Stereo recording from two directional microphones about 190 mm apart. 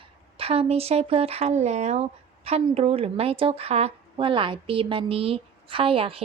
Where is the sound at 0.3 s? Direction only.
30° right (ahead or behind).